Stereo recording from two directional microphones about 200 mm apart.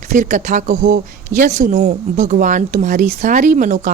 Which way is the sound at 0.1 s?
40° right (ahead or behind).